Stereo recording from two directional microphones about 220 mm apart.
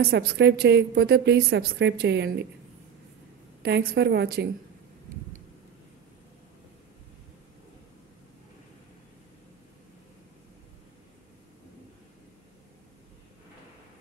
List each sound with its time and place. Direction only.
0.1 s a woman's voice: 50° right (ahead or behind)
3.6 s a woman's voice: 45° right (ahead or behind)